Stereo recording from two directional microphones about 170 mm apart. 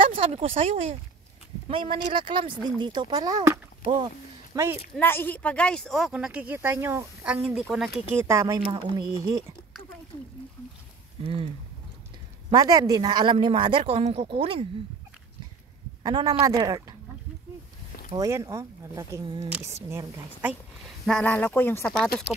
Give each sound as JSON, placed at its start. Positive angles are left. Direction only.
{"t": 0.0, "sound": "speech", "side_deg": -35}
{"t": 4.5, "sound": "speech", "side_deg": -20}
{"t": 4.9, "sound": "speech", "side_deg": 10}
{"t": 8.1, "sound": "speech", "side_deg": -15}
{"t": 12.4, "sound": "speech", "side_deg": -20}
{"t": 16.0, "sound": "speech", "side_deg": -25}
{"t": 18.1, "sound": "speech", "side_deg": -20}
{"t": 19.9, "sound": "speech", "side_deg": -15}
{"t": 21.0, "sound": "speech", "side_deg": 5}